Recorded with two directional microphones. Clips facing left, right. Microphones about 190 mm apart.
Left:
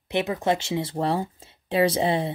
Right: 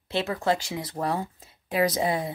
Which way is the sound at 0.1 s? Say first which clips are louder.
Left 2 dB; 20° left (ahead or behind).